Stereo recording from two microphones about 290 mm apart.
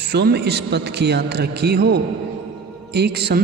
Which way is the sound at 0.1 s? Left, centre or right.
Right.